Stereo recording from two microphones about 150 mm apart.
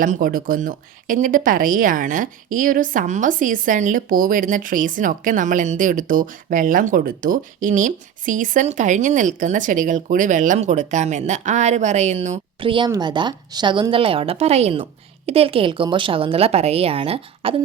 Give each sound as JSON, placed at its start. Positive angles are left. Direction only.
{"t": 0.0, "sound": "a woman's voice", "side_deg": -65}
{"t": 12.5, "sound": "speech", "side_deg": -35}